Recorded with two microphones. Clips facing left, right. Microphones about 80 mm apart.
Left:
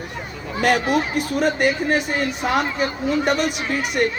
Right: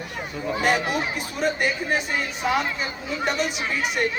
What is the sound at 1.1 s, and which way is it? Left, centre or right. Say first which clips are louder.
A woman's voice: left 5 dB; left.